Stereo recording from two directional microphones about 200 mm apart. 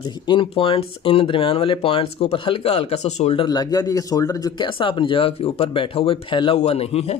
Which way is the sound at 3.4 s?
20° left (ahead or behind).